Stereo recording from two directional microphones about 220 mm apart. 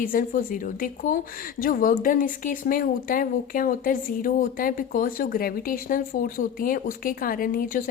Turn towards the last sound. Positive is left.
turn(degrees=40)  # may be behind; listen again after turning